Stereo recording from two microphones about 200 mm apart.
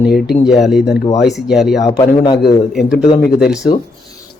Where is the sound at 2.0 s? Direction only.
20° left (ahead or behind).